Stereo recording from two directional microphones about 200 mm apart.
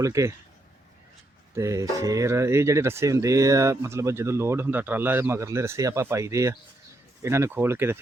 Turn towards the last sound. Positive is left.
turn(degrees=-10)  # may be behind; listen again after turning